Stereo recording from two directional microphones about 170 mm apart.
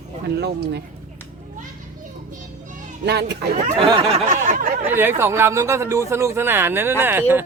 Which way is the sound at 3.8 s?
35° right (ahead or behind).